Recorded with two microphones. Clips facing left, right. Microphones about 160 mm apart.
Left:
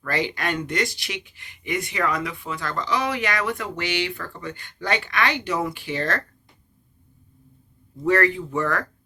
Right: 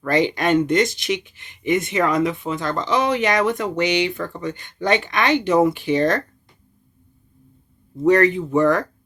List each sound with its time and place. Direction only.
0.0 s speech: 20° right (ahead or behind)
8.0 s speech: 20° right (ahead or behind)